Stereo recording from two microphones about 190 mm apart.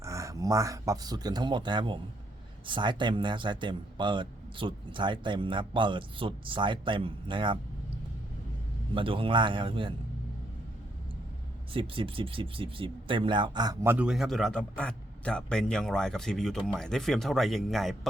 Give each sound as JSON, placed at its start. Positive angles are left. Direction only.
{"t": 0.0, "sound": "a man's voice", "side_deg": -15}
{"t": 9.0, "sound": "a man's voice", "side_deg": -30}
{"t": 11.7, "sound": "a man's voice", "side_deg": -30}
{"t": 13.9, "sound": "a man's voice", "side_deg": -5}